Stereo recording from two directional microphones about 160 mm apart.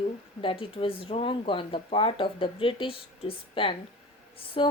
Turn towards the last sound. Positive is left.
turn(degrees=35)  # may be behind; listen again after turning